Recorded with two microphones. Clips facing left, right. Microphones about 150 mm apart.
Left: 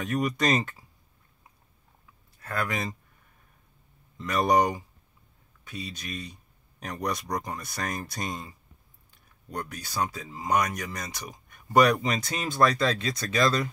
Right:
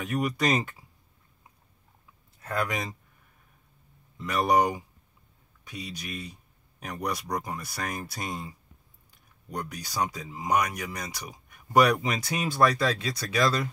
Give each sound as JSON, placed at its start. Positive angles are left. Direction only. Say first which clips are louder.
{"t": 0.0, "sound": "speech", "louder": "left 1 dB", "side_deg": -10}
{"t": 2.4, "sound": "speech", "louder": "right 1 dB", "side_deg": -15}
{"t": 4.2, "sound": "speech", "louder": "left 1 dB", "side_deg": -10}